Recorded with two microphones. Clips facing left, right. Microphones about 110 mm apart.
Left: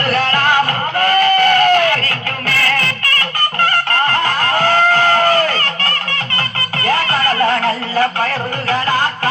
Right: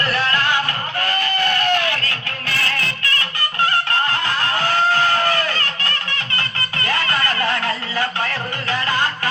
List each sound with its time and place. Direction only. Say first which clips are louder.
0.0 s music: left 5 dB; 45° left (ahead or behind)